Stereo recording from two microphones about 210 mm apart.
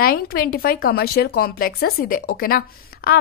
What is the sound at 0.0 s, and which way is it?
Speech, 45° left (ahead or behind).